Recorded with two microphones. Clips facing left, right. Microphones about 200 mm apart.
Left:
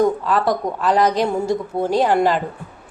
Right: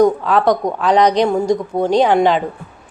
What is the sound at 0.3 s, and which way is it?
A woman's voice, centre (ahead or behind).